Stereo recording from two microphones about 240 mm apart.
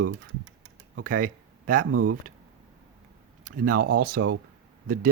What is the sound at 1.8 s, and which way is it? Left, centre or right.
Speech, right.